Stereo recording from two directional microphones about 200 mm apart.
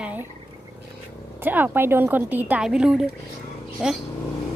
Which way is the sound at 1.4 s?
10° right (ahead or behind).